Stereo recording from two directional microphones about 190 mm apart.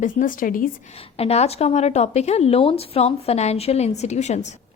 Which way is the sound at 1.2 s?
35° left (ahead or behind).